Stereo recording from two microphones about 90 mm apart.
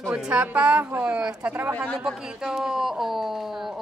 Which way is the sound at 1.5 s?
25° right (ahead or behind).